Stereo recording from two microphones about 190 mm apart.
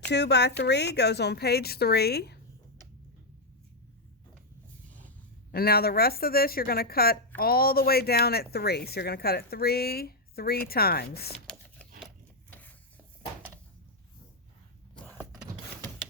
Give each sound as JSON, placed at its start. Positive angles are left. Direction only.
{"t": 0.1, "sound": "a woman's voice", "side_deg": 60}
{"t": 4.9, "sound": "a sound", "side_deg": 10}
{"t": 5.5, "sound": "a woman's voice", "side_deg": 55}
{"t": 12.5, "sound": "stir", "side_deg": 10}